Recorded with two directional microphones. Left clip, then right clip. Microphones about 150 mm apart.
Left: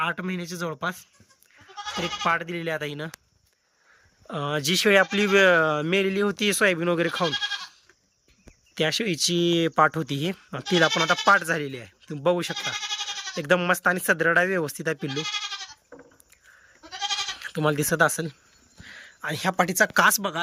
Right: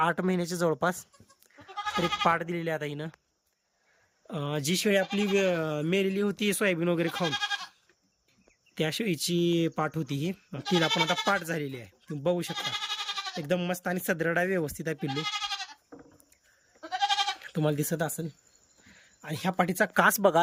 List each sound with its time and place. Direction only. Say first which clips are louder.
0.0 s speech: right 1 dB; 30° right (ahead or behind)
1.5 s speech: right 1 dB; 20° right (ahead or behind)
4.3 s speech: left 6 dB; 15° right (ahead or behind)
8.7 s speech: left 5 dB; 15° right (ahead or behind)
10.8 s speech: left 4 dB; 25° right (ahead or behind)
11.1 s speech: left 8 dB; 10° right (ahead or behind)
16.9 s goat: right 2 dB; 30° right (ahead or behind)
17.4 s speech: left 5 dB; 10° right (ahead or behind); by 20.4 s 30° right (ahead or behind)